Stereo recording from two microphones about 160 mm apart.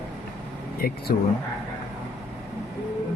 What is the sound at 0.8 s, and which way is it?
Speech, 70° left (ahead or behind).